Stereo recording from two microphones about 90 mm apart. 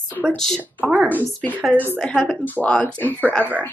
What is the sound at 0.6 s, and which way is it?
Speech, 15° right (ahead or behind).